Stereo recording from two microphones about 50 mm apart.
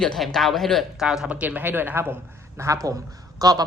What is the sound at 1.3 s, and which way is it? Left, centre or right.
Speech, right.